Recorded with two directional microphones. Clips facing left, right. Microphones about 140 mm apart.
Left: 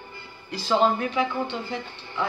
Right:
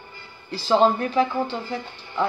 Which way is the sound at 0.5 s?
35° right (ahead or behind).